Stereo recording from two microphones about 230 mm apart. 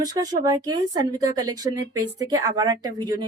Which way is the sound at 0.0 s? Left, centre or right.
Centre.